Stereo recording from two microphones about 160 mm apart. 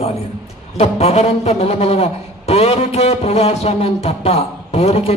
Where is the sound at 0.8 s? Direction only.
40° left (ahead or behind).